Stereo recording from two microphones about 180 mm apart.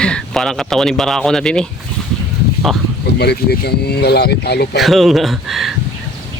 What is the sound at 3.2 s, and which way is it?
Speech, 65° left (ahead or behind).